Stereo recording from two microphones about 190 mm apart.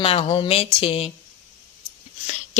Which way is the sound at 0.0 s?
30° left (ahead or behind).